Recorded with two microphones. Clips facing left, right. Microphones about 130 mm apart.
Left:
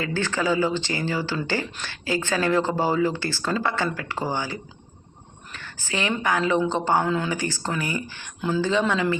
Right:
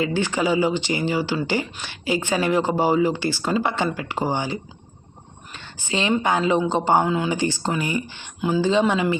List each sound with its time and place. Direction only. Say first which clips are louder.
0.0 s a woman's voice: right 3 dB; 15° right (ahead or behind)